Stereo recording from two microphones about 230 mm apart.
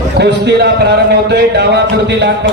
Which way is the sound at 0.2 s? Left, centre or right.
Right.